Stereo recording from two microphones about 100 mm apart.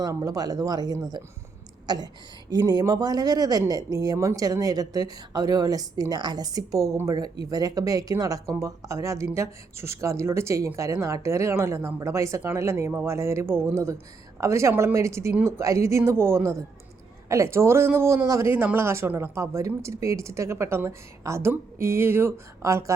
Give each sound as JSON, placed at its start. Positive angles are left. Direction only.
{"t": 0.0, "sound": "a woman's voice", "side_deg": -35}
{"t": 18.5, "sound": "speech", "side_deg": -20}